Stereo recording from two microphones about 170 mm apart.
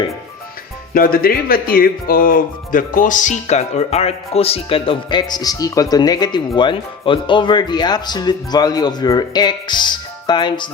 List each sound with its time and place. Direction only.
0.9 s speech: 60° left (ahead or behind); by 10.7 s 25° left (ahead or behind)